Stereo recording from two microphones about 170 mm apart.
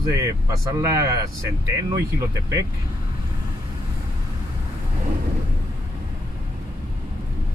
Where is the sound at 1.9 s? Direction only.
20° right (ahead or behind).